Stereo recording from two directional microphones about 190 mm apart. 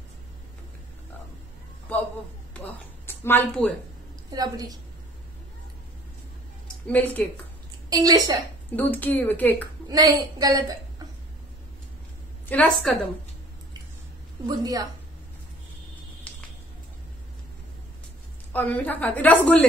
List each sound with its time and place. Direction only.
2.5 s speech: 10° left (ahead or behind)
4.3 s a woman's voice: 20° right (ahead or behind)
6.9 s a woman's voice: 10° left (ahead or behind)
7.9 s a woman's voice: 20° right (ahead or behind)
8.7 s a woman's voice: 10° left (ahead or behind)
9.8 s a woman's voice: 20° right (ahead or behind)
12.4 s a woman's voice: 10° left (ahead or behind)
14.4 s a woman's voice: 20° right (ahead or behind)
16.3 s a sound: 5° left (ahead or behind)
18.5 s a woman's voice: 10° left (ahead or behind)